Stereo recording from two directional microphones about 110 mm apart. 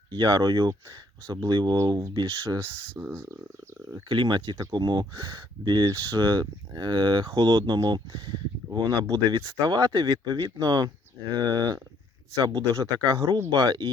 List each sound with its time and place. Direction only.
0.1 s speech: 40° right (ahead or behind)
3.0 s speech: 15° right (ahead or behind)
4.1 s speech: 45° right (ahead or behind)